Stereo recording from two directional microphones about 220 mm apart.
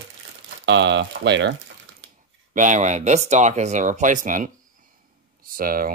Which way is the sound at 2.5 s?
35° right (ahead or behind).